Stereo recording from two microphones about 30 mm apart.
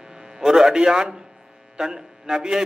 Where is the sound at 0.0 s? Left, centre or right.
Right.